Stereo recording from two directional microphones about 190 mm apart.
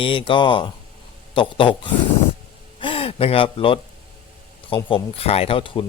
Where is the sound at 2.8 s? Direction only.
30° left (ahead or behind).